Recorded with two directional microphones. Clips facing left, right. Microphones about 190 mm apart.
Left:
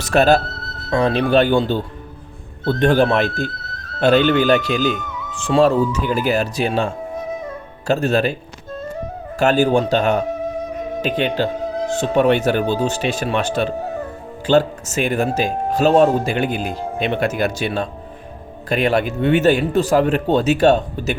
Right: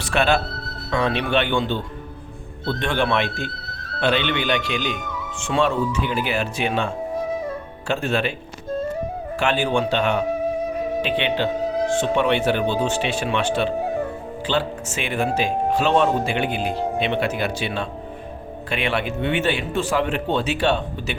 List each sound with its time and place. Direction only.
0.0 s speech: 40° left (ahead or behind)
9.4 s speech: 40° left (ahead or behind)